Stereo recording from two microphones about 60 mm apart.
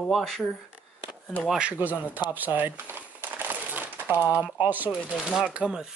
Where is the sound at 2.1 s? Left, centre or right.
Right.